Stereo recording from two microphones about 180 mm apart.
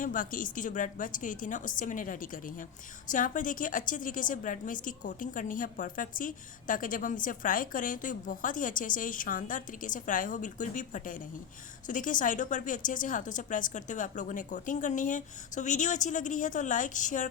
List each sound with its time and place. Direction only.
0.0 s a woman's voice: 50° left (ahead or behind)